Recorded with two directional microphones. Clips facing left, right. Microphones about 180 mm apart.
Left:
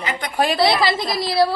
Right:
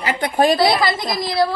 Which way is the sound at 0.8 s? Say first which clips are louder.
Even; 30° left (ahead or behind).